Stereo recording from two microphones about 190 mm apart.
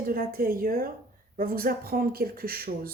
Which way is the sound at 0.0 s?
50° right (ahead or behind).